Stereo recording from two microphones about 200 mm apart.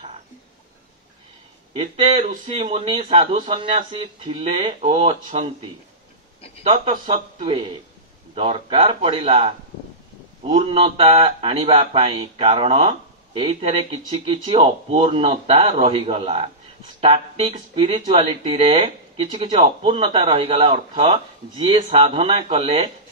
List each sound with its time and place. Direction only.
1.8 s a man's voice: 30° right (ahead or behind)